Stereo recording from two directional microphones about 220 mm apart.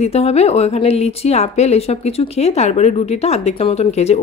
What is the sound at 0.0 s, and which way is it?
Speech, 30° left (ahead or behind).